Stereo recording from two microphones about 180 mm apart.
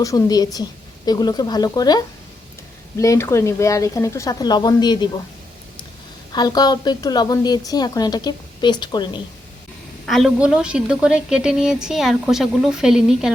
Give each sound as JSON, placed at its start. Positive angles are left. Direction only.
{"t": 0.0, "sound": "a woman's voice", "side_deg": 20}
{"t": 6.3, "sound": "a woman's voice", "side_deg": 20}
{"t": 10.1, "sound": "a woman's voice", "side_deg": 0}